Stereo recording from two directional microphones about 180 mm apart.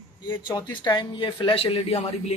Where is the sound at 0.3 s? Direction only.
25° left (ahead or behind).